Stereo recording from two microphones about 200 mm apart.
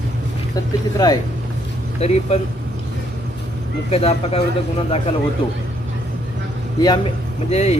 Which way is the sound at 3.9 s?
30° left (ahead or behind).